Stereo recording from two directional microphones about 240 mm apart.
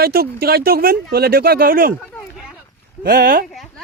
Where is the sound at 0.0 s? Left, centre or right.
Right.